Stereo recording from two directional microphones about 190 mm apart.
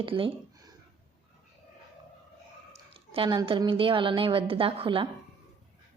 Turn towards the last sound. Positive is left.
turn(degrees=-30)  # may be behind; listen again after turning